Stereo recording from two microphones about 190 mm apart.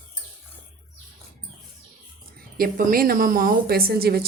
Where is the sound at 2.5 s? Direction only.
45° right (ahead or behind).